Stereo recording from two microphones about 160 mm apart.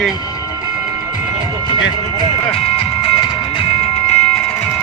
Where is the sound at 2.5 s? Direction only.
35° left (ahead or behind).